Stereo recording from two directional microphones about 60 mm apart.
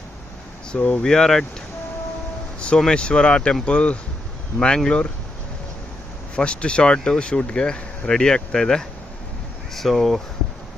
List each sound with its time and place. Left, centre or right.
0.7 s speech: left
1.0 s speech: centre
2.9 s speech: centre
6.3 s speech: centre